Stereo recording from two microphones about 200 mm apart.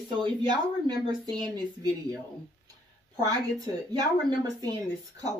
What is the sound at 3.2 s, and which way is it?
Speech, 20° right (ahead or behind).